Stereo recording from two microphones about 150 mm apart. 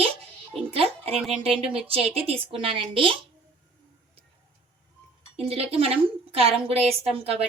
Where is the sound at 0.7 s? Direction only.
40° right (ahead or behind).